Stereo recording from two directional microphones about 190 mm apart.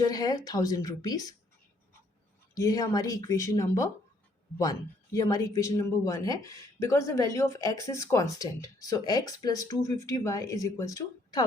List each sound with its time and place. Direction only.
0.0 s a woman's voice: 20° left (ahead or behind)
2.6 s speech: 20° left (ahead or behind)